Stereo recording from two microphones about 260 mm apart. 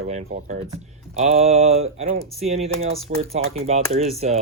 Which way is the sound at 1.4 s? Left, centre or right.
Right.